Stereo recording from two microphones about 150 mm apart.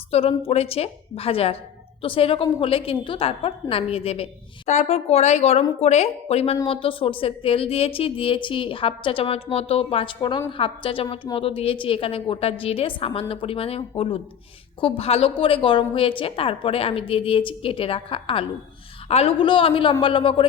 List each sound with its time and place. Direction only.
0.1 s a woman's voice: 40° left (ahead or behind)